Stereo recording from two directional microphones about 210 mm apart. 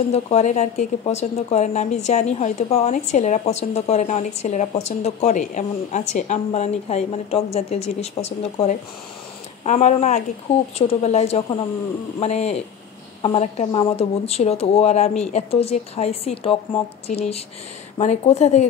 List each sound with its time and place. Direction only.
0.1 s speech: 30° left (ahead or behind)